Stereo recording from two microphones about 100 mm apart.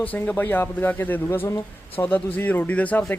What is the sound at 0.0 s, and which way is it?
Speech, 15° left (ahead or behind).